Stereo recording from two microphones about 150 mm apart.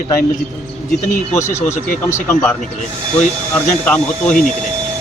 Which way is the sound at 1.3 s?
20° left (ahead or behind).